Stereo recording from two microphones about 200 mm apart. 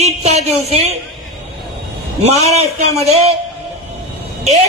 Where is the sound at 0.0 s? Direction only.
35° right (ahead or behind).